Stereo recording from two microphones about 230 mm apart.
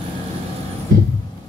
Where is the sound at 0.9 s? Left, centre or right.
Right.